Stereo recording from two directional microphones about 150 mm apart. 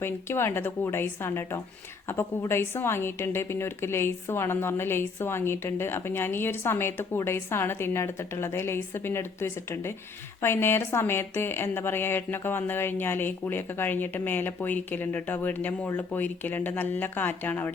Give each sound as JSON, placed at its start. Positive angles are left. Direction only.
{"t": 0.0, "sound": "a woman's voice", "side_deg": 15}